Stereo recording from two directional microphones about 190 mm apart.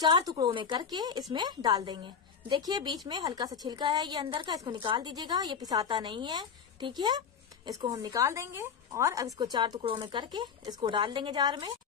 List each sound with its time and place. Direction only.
0.0 s a woman's voice: 20° right (ahead or behind)